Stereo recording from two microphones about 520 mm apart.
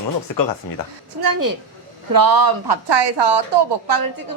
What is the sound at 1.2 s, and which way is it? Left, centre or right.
A woman's voice, right.